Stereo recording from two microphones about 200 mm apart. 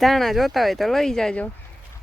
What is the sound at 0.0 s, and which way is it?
Speech, centre (ahead or behind).